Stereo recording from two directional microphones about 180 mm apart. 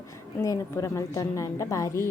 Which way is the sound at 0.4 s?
15° left (ahead or behind).